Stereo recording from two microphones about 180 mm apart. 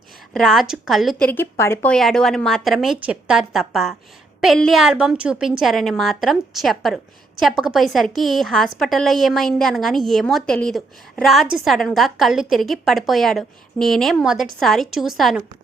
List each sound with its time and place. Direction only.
0.3 s a woman's voice: centre (ahead or behind)
1.3 s a woman's voice: 15° left (ahead or behind)